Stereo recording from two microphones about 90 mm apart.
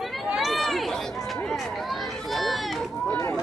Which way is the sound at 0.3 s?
Centre (ahead or behind).